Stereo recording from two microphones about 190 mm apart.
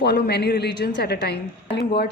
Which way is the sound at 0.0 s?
60° left (ahead or behind).